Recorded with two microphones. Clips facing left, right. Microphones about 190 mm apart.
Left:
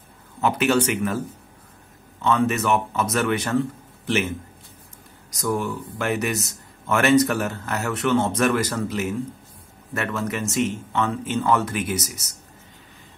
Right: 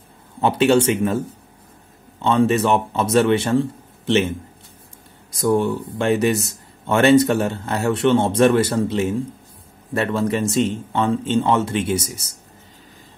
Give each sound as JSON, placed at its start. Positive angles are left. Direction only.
{"t": 0.4, "sound": "speech", "side_deg": -30}
{"t": 2.2, "sound": "speech", "side_deg": -30}
{"t": 5.3, "sound": "speech", "side_deg": -30}